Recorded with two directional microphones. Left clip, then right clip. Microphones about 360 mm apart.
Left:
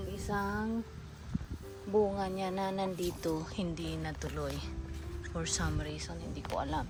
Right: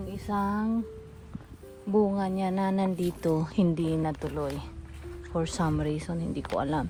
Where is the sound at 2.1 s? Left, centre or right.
Centre.